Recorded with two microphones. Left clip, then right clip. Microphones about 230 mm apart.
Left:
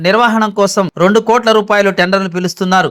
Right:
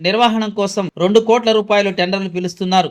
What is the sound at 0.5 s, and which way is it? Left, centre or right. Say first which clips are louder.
Speech: left 7 dB; left.